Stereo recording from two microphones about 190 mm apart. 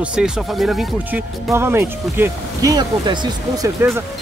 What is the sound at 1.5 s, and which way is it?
Speech, 10° right (ahead or behind).